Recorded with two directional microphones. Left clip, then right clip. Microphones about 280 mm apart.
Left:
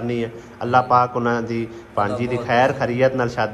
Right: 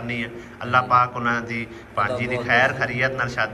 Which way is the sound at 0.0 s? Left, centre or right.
Left.